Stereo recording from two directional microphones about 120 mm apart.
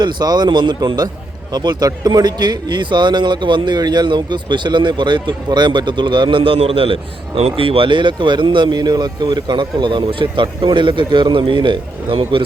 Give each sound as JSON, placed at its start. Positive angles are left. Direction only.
{"t": 0.0, "sound": "a man's voice", "side_deg": -35}